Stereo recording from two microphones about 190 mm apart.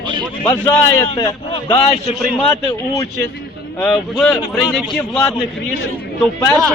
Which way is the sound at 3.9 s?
Centre (ahead or behind).